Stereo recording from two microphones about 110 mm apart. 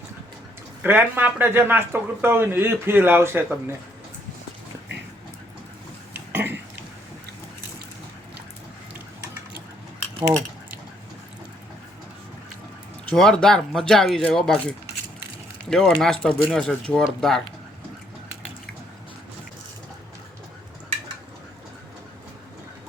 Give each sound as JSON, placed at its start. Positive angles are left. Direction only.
{"t": 0.8, "sound": "speech", "side_deg": -20}
{"t": 6.1, "sound": "burping", "side_deg": -15}
{"t": 13.1, "sound": "speech", "side_deg": 5}